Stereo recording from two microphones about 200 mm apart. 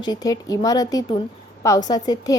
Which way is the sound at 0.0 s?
20° left (ahead or behind).